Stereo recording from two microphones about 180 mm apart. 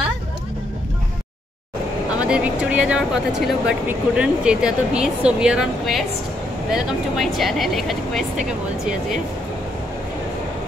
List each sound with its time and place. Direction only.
2.2 s speech: 5° right (ahead or behind)